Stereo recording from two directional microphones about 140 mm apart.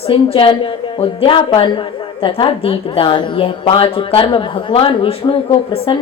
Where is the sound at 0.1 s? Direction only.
35° left (ahead or behind).